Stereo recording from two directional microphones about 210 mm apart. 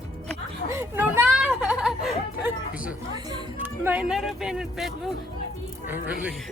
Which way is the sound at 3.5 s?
10° right (ahead or behind).